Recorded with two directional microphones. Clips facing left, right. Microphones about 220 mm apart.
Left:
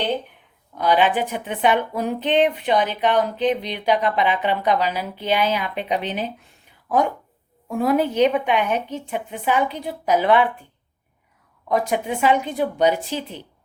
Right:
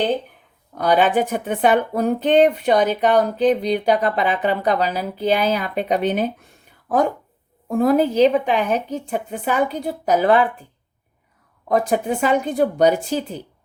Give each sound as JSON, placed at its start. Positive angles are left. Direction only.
{"t": 0.8, "sound": "speech", "side_deg": -45}
{"t": 7.7, "sound": "speech", "side_deg": -40}
{"t": 11.7, "sound": "speech", "side_deg": -40}